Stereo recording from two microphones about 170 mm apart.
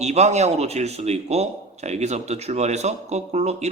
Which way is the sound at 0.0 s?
40° right (ahead or behind).